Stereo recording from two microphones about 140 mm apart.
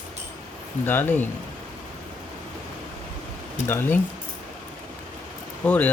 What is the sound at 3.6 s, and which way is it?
Speech, 15° left (ahead or behind).